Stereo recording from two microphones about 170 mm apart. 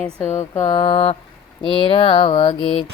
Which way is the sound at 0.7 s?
30° left (ahead or behind).